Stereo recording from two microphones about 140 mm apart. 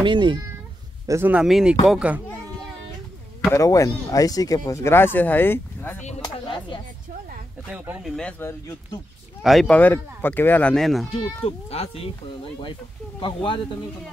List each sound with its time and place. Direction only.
0.0 s speech: 35° right (ahead or behind)
1.0 s speech: 15° right (ahead or behind)
3.5 s speech: 25° left (ahead or behind)
6.2 s a sound: 35° left (ahead or behind)
7.7 s speech: 10° right (ahead or behind)
8.2 s speech: 15° left (ahead or behind)
9.4 s speech: centre (ahead or behind)
9.7 s speech: 15° left (ahead or behind)
11.4 s speech: 45° left (ahead or behind)
13.2 s speech: 35° left (ahead or behind)